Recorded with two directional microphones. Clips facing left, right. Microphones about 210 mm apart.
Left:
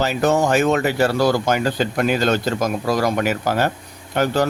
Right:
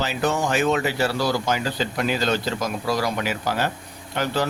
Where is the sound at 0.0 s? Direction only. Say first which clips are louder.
Left 6 dB; 45° left (ahead or behind).